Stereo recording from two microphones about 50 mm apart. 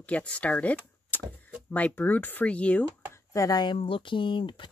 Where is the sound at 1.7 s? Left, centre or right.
Left.